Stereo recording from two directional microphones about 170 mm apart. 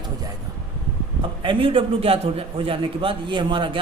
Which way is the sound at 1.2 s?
30° right (ahead or behind).